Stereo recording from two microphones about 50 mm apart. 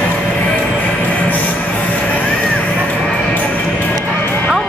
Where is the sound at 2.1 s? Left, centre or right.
Left.